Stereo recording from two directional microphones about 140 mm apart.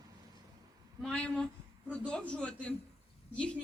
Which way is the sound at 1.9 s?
10° left (ahead or behind).